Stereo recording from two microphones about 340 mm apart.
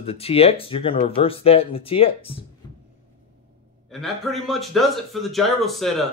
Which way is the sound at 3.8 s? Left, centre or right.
Centre.